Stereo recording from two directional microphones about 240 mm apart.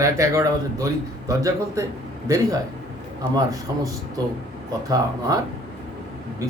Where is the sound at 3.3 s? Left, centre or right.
Centre.